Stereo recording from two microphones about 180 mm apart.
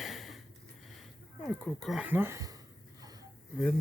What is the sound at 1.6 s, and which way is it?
Speech, centre (ahead or behind).